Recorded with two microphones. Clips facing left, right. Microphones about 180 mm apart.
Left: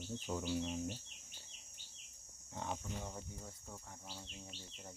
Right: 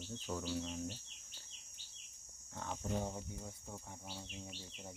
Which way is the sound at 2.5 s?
20° left (ahead or behind).